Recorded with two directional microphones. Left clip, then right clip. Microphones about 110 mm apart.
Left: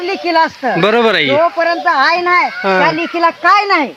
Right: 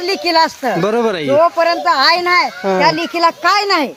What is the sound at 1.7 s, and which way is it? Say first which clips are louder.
Speech: left 1 dB; 35° right (ahead or behind).